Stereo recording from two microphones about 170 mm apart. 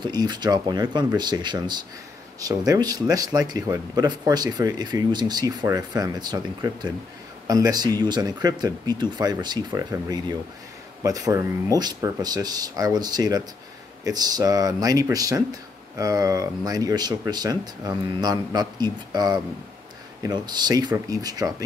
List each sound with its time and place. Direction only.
0.0 s speech: 25° right (ahead or behind)